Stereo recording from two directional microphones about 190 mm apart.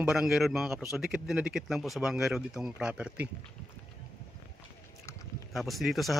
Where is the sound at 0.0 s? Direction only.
5° right (ahead or behind).